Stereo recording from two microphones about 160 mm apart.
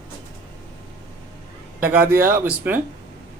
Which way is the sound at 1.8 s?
15° right (ahead or behind).